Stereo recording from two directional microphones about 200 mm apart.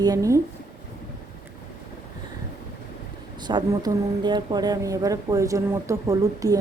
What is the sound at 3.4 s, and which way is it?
A woman's voice, 20° right (ahead or behind).